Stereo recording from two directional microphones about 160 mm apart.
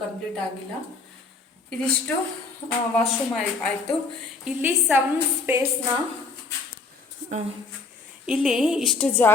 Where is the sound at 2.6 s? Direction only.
35° left (ahead or behind).